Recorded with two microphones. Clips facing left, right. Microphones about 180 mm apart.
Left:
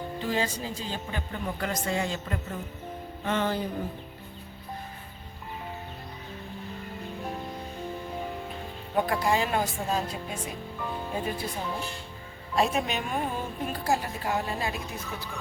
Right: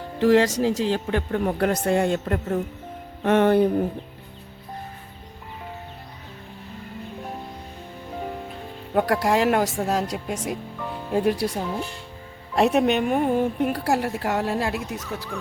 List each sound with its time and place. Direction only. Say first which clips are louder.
0.2 s a woman's voice: right 13 dB; 85° right; by 2.6 s 60° right (ahead or behind)
3.2 s music: right 11 dB; 65° right (ahead or behind)
9.0 s a woman's voice: right 5 dB; 75° right (ahead or behind)
12.5 s a woman's voice: right 8 dB; 65° right (ahead or behind); by 15.3 s 85° right